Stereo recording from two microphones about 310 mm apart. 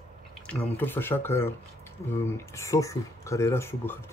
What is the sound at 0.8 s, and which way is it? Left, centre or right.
Speech, centre.